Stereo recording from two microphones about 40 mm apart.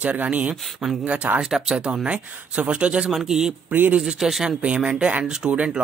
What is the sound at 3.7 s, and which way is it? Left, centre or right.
Speech, right.